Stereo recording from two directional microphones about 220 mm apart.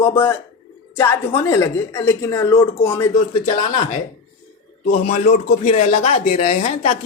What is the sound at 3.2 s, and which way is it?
Speech, 35° left (ahead or behind).